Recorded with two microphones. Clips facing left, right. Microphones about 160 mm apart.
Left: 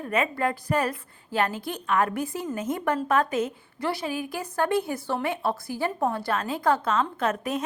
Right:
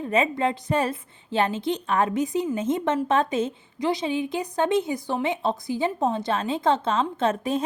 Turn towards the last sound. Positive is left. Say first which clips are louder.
# right 3 dB
turn(degrees=-30)  # may be behind; listen again after turning